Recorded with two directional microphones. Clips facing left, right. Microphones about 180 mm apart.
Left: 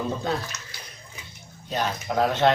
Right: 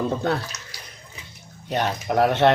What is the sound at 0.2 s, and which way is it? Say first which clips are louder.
Speech: right 3 dB; 65° right (ahead or behind).